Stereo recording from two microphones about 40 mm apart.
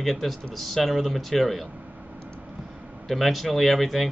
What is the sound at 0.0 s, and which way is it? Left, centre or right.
Speech, centre.